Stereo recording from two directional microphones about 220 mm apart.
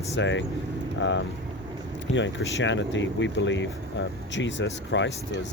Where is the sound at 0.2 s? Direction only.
55° left (ahead or behind).